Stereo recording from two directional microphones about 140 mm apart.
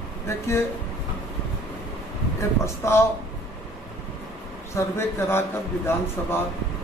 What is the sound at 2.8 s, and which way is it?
Speech, 20° left (ahead or behind).